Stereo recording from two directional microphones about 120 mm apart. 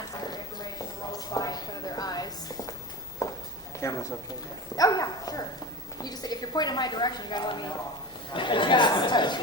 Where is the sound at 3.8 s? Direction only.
25° left (ahead or behind).